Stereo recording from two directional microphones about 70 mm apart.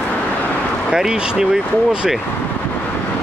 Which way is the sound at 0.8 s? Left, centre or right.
Centre.